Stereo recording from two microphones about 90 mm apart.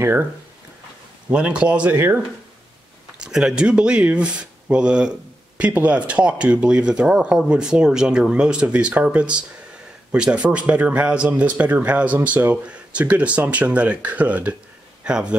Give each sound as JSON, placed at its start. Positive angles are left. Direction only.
{"t": 0.0, "sound": "speech", "side_deg": -25}
{"t": 1.3, "sound": "speech", "side_deg": -15}
{"t": 3.2, "sound": "speech", "side_deg": -5}